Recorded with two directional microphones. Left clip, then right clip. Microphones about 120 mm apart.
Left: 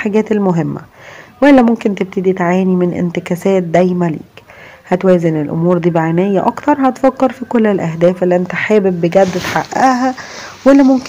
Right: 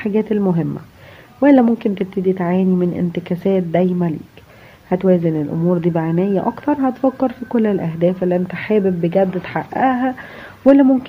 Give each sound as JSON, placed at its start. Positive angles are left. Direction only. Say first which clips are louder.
{"t": 0.0, "sound": "speech", "louder": "left 5 dB", "side_deg": 30}